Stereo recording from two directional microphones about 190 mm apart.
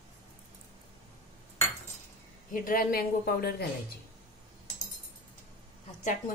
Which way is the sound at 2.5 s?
45° left (ahead or behind).